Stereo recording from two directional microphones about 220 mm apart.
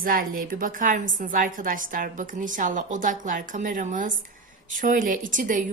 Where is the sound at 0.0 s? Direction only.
40° right (ahead or behind).